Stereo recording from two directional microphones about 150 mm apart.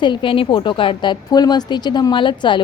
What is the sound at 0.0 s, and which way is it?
A woman's voice, 35° left (ahead or behind).